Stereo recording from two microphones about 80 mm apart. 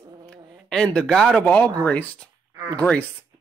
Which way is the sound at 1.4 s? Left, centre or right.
Centre.